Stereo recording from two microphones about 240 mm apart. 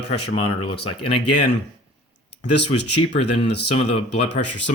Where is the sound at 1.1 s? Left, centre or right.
Left.